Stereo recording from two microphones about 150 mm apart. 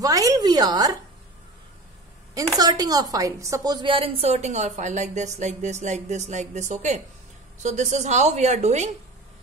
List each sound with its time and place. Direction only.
0.0 s a woman's voice: 25° right (ahead or behind)
2.3 s a woman's voice: 25° right (ahead or behind); by 8.9 s 50° right (ahead or behind)